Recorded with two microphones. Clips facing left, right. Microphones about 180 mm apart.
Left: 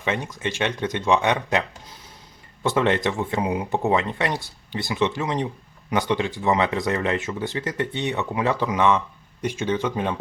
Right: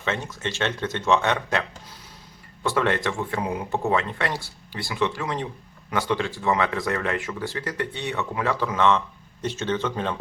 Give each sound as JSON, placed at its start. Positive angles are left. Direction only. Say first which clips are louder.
{"t": 0.0, "sound": "speech", "louder": "left 2 dB", "side_deg": 15}
{"t": 2.6, "sound": "speech", "louder": "left 3 dB", "side_deg": 20}